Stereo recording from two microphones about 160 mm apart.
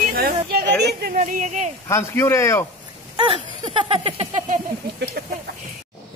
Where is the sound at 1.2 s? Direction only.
50° right (ahead or behind).